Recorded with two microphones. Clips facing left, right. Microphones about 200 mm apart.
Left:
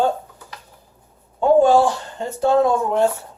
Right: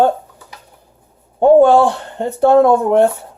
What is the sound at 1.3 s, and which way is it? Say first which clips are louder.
Speech: right 5 dB; 60° right (ahead or behind).